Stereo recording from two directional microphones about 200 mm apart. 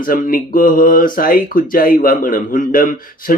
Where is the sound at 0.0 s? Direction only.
45° left (ahead or behind).